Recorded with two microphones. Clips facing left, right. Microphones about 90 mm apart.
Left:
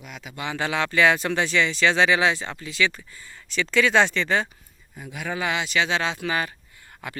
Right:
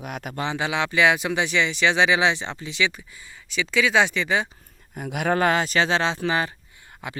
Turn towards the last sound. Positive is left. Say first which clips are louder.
# right 1 dB
turn(degrees=-20)  # may be behind; listen again after turning